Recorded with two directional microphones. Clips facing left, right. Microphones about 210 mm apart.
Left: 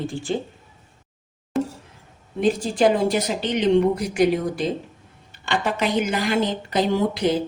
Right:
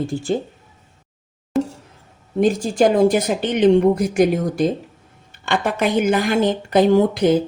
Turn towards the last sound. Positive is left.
turn(degrees=-50)  # may be behind; listen again after turning